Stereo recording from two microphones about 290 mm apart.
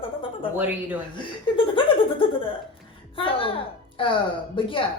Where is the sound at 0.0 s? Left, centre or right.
Centre.